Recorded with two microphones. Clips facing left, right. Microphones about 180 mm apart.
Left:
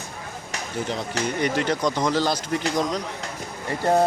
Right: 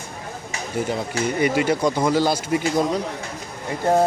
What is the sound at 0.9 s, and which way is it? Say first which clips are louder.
Speech: right 2 dB; 10° right (ahead or behind).